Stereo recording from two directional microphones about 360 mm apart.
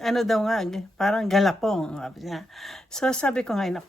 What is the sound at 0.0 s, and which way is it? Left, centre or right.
A woman's voice, centre.